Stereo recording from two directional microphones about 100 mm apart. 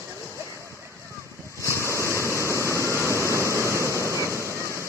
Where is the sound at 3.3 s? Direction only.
30° right (ahead or behind).